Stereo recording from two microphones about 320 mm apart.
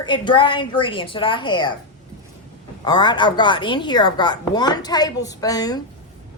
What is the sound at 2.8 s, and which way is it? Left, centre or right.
Speech, centre.